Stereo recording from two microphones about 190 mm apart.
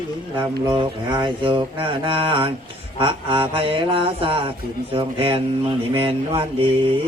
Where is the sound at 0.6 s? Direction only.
25° right (ahead or behind).